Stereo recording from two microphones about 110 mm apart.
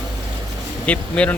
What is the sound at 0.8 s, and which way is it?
Speech, 10° left (ahead or behind).